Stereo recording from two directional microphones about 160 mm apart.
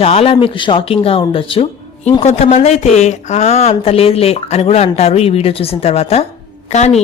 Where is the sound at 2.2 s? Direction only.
45° left (ahead or behind).